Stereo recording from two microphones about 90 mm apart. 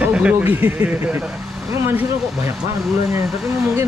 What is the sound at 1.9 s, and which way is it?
Speech, 25° right (ahead or behind).